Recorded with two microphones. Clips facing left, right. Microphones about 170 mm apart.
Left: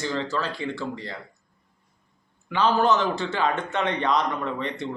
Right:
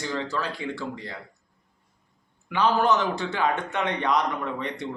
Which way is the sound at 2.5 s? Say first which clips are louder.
Left 1 dB; 15° right (ahead or behind).